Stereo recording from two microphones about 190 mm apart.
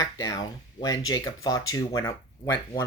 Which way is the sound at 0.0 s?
20° left (ahead or behind).